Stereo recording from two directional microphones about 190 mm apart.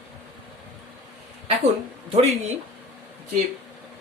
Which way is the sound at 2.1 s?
35° right (ahead or behind).